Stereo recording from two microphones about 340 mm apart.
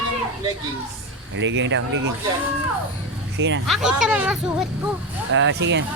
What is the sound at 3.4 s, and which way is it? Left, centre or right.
Speech, right.